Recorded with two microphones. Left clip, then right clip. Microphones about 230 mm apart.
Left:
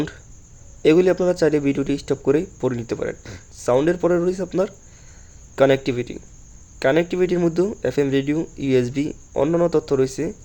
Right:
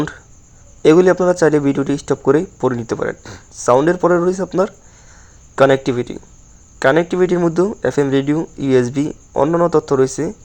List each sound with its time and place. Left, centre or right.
0.8 s a man's voice: centre